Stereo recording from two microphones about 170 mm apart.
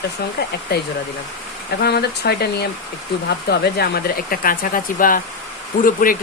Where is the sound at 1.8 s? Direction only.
70° left (ahead or behind).